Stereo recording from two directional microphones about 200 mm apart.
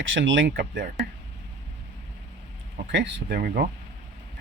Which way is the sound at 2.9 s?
65° right (ahead or behind).